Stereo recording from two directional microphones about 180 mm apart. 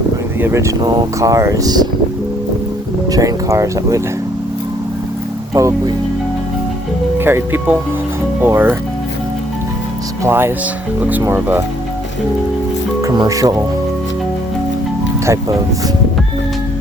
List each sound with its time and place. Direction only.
0.3 s speech: 15° right (ahead or behind)
3.1 s speech: 20° right (ahead or behind)
5.5 s speech: 15° right (ahead or behind)
7.2 s speech: 10° right (ahead or behind)
10.2 s speech: 15° right (ahead or behind)
13.0 s speech: 20° right (ahead or behind)